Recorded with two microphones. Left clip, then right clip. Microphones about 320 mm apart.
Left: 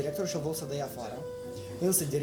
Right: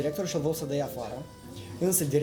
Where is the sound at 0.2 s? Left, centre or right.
Right.